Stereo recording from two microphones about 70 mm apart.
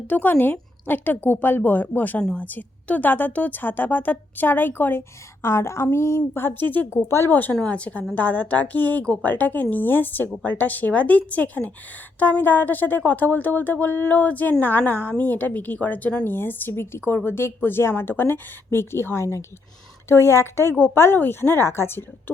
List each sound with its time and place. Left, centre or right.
0.1 s a woman's voice: left
6.9 s a woman's voice: left
7.5 s a woman's voice: centre; by 22.0 s left